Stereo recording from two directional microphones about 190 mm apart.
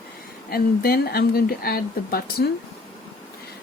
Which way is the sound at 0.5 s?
55° left (ahead or behind).